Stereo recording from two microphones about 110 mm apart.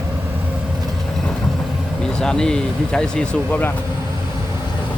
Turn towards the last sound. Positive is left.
turn(degrees=5)  # may be behind; listen again after turning